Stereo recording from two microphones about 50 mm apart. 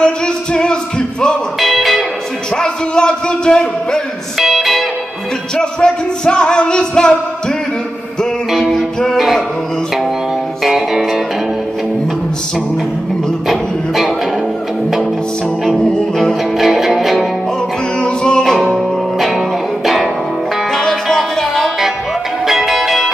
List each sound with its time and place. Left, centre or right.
0.0 s music: centre
1.6 s music: centre
2.5 s music: centre
4.4 s music: centre
5.6 s music: centre
8.5 s music: centre
10.6 s music: centre
13.5 s music: centre
16.5 s music: centre
18.0 s music: centre
18.4 s music: centre